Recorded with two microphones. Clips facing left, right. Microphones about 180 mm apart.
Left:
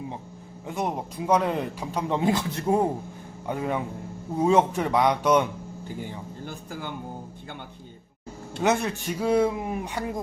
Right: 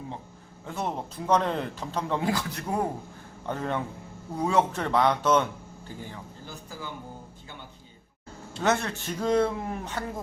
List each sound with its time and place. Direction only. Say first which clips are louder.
0.7 s a man's voice: left 3 dB; 15° left (ahead or behind)
3.4 s a man's voice: left 2 dB; 10° left (ahead or behind)
6.4 s speech: left 4 dB; 60° left (ahead or behind)
8.6 s a man's voice: left 2 dB; 15° left (ahead or behind)